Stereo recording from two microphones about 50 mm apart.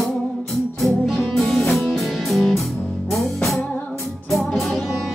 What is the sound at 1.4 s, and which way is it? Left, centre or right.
Music, centre.